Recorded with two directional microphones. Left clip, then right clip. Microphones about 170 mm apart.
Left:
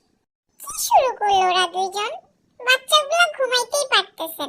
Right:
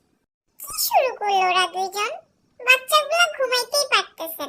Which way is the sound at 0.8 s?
25° right (ahead or behind).